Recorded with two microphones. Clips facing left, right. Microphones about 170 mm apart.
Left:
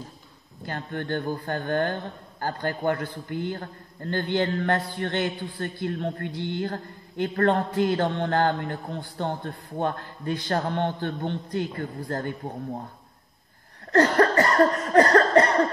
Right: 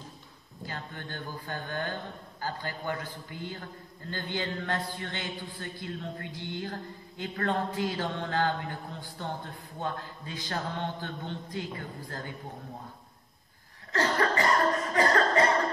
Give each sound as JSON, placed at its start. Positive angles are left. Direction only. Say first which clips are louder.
{"t": 0.7, "sound": "a man's voice", "louder": "left 10 dB", "side_deg": 60}
{"t": 13.9, "sound": "cough", "louder": "left 8 dB", "side_deg": 60}